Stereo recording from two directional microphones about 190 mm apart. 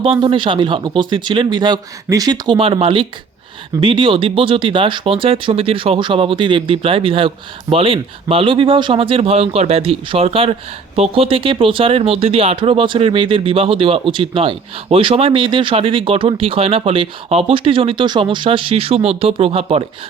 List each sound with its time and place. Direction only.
0.2 s speech: 25° right (ahead or behind)